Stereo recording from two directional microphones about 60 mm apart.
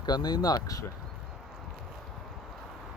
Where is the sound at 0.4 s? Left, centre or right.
Left.